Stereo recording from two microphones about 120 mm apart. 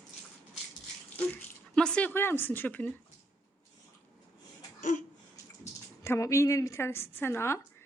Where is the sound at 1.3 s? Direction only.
10° left (ahead or behind).